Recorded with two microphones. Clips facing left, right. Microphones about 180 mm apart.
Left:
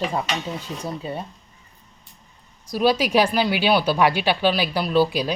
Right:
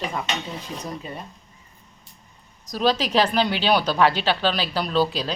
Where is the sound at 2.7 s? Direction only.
10° left (ahead or behind).